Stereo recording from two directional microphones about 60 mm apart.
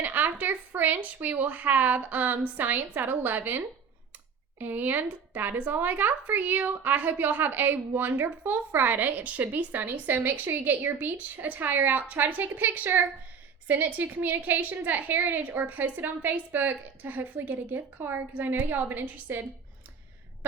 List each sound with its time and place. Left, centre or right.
0.0 s a woman's voice: right